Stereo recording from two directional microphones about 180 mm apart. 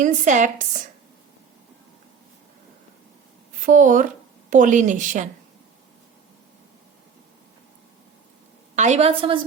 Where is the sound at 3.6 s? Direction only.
45° right (ahead or behind).